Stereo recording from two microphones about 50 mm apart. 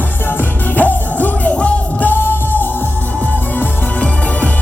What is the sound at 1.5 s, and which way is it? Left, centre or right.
Music, left.